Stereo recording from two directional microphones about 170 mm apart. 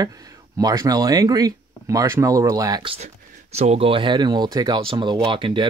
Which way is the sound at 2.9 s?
40° right (ahead or behind).